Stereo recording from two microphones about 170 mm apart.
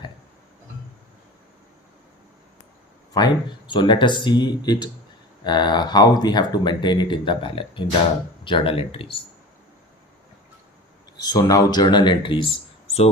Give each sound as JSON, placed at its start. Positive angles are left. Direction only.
{"t": 3.1, "sound": "speech", "side_deg": 25}
{"t": 11.2, "sound": "speech", "side_deg": 20}